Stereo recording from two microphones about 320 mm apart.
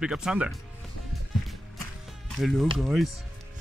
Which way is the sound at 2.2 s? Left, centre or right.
Centre.